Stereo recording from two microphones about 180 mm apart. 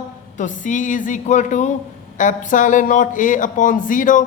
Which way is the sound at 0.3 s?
45° left (ahead or behind).